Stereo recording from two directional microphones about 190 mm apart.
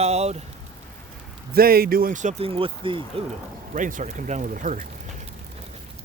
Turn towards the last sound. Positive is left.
turn(degrees=-45)  # may be behind; listen again after turning